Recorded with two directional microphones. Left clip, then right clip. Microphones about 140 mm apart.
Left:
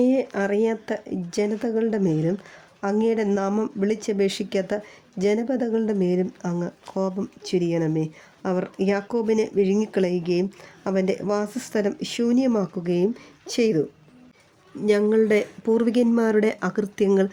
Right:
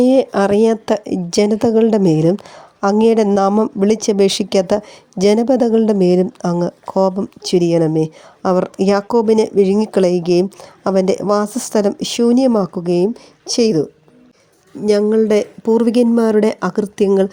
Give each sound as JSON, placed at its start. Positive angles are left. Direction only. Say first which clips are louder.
{"t": 0.0, "sound": "speech", "louder": "right 9 dB", "side_deg": -55}
{"t": 14.8, "sound": "speech", "louder": "right 6 dB", "side_deg": -35}